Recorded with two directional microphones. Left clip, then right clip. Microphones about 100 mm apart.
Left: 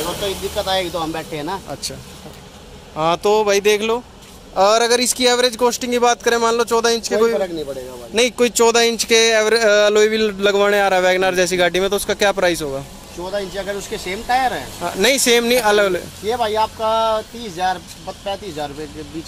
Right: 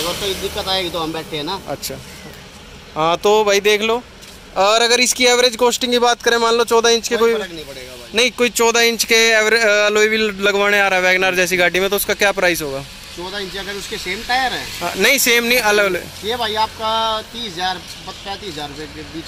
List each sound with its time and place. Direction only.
0.2 s speech: centre (ahead or behind)
3.0 s speech: 5° left (ahead or behind)
8.1 s speech: 25° left (ahead or behind)
14.0 s speech: 30° left (ahead or behind)
14.4 s speech: 15° left (ahead or behind)
16.3 s speech: 10° left (ahead or behind)